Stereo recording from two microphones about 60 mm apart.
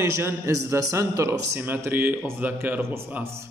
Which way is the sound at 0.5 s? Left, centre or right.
Right.